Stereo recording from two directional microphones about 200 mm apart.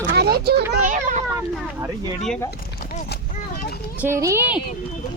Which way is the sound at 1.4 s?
10° right (ahead or behind).